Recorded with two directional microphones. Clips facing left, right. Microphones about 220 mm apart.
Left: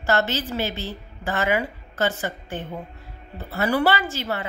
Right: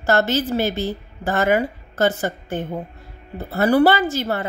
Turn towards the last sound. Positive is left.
turn(degrees=-45)  # may be behind; listen again after turning